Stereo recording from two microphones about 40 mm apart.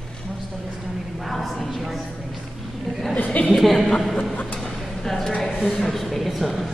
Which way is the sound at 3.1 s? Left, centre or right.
Left.